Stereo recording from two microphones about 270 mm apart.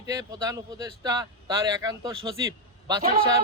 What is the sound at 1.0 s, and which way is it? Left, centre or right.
A man's voice, centre.